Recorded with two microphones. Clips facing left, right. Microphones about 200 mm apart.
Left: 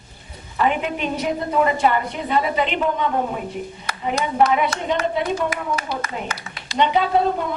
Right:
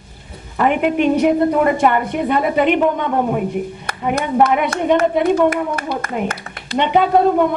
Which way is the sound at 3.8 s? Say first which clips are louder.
Right 1 dB; 55° right (ahead or behind).